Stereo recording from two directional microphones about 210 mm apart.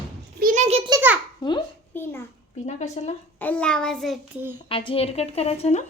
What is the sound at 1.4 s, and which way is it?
Speech, 20° left (ahead or behind).